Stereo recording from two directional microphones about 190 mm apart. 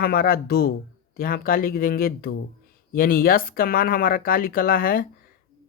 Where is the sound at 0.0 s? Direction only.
50° left (ahead or behind).